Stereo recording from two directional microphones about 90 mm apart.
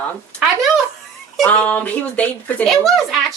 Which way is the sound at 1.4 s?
15° left (ahead or behind).